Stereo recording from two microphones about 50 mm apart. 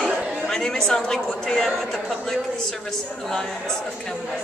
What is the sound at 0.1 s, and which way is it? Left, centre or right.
Chatter, centre.